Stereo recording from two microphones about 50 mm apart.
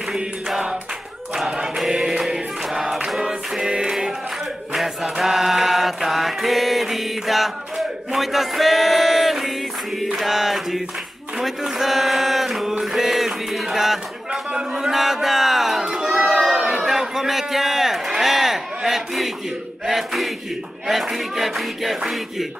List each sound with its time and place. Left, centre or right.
0.1 s music: centre
1.8 s choir: centre
4.7 s mantra: centre
8.1 s a sound: centre
14.8 s crowd: centre
19.9 s a sound: centre